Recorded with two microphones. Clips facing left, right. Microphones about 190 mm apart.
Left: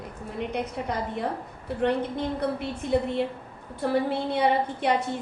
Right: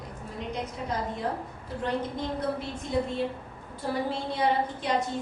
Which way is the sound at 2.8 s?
65° left (ahead or behind).